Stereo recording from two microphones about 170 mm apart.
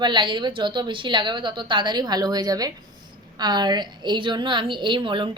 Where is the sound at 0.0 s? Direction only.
25° right (ahead or behind).